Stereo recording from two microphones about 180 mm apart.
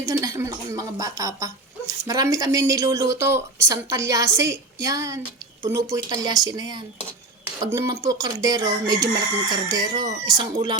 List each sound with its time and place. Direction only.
0.0 s speech: 15° right (ahead or behind)